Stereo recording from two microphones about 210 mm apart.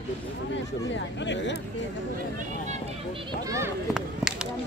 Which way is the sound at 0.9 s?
60° left (ahead or behind).